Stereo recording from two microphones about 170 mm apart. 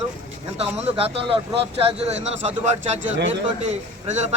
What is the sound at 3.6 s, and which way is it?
Speech, 40° right (ahead or behind).